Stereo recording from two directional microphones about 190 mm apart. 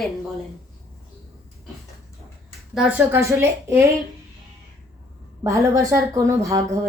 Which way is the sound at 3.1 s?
15° right (ahead or behind).